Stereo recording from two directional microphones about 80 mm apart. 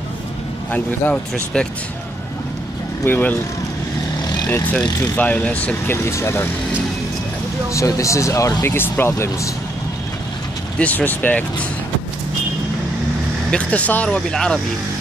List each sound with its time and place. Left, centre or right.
0.7 s speech: centre
3.1 s speech: left
5.1 s speech: centre
6.0 s speech: left
7.7 s speech: left
8.6 s speech: left
10.8 s speech: centre
13.5 s speech: centre